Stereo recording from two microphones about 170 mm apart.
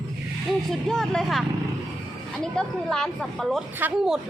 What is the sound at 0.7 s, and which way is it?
A woman's voice, 5° left (ahead or behind).